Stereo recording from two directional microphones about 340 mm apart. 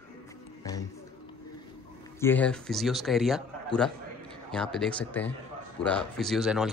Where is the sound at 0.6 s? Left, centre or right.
Centre.